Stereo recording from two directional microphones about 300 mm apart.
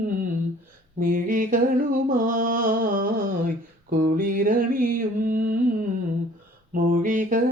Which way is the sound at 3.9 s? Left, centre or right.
Right.